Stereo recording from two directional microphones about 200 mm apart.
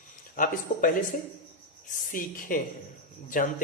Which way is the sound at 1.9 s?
40° left (ahead or behind).